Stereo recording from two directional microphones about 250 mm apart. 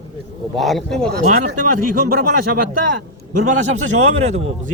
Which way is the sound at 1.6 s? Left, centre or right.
Right.